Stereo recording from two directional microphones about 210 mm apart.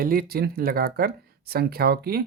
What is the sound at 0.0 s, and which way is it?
Speech, 45° right (ahead or behind).